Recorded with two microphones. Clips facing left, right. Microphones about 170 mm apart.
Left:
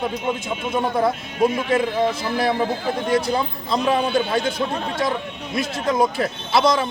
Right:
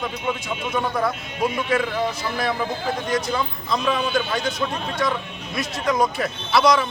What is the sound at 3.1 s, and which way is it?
Speech, 30° left (ahead or behind).